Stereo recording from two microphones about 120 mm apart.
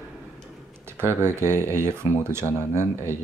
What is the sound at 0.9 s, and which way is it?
Speech, 20° right (ahead or behind).